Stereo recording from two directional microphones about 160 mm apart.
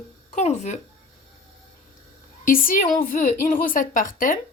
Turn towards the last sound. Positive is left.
turn(degrees=60)  # may be behind; listen again after turning